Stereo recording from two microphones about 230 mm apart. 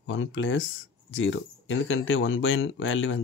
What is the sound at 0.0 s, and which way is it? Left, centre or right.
Speech, left.